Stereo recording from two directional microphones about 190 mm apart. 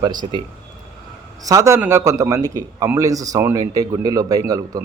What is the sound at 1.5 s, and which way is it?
Speech, 15° right (ahead or behind).